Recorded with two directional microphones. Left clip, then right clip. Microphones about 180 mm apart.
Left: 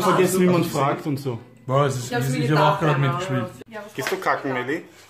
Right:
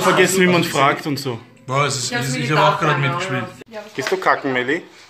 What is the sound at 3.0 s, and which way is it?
Speech, 30° left (ahead or behind).